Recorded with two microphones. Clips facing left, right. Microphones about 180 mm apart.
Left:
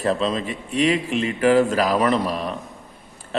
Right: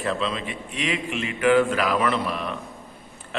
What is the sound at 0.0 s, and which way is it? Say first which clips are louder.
A man's voice: left 5 dB; 40° left (ahead or behind).